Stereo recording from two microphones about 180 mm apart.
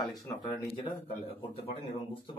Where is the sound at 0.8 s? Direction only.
30° left (ahead or behind).